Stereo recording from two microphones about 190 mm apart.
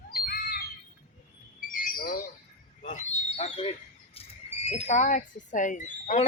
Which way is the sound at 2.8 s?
40° left (ahead or behind).